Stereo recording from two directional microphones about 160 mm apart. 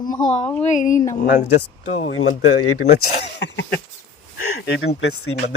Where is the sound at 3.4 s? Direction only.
90° left.